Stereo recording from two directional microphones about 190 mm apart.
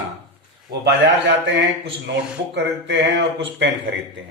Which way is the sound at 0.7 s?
55° right (ahead or behind).